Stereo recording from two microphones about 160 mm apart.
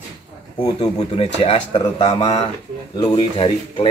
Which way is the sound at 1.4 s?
35° left (ahead or behind).